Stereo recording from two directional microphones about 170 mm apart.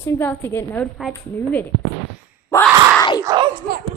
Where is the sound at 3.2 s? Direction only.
25° right (ahead or behind).